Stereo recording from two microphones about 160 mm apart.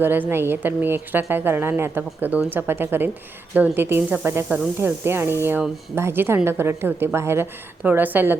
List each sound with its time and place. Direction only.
0.0 s a woman's voice: 15° right (ahead or behind)